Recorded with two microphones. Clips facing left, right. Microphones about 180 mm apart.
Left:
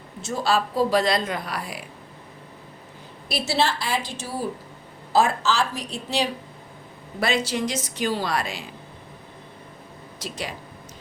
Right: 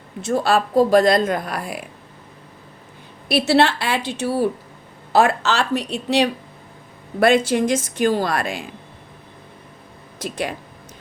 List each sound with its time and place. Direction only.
0.2 s speech: 60° right (ahead or behind)
3.2 s a woman's voice: 65° right (ahead or behind)
7.2 s speech: 55° right (ahead or behind)
10.2 s speech: 55° right (ahead or behind)